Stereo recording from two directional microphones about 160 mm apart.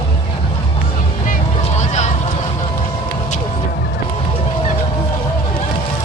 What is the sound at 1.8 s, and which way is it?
Vehicle, 45° left (ahead or behind).